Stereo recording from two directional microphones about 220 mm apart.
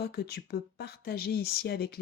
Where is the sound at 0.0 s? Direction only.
45° left (ahead or behind).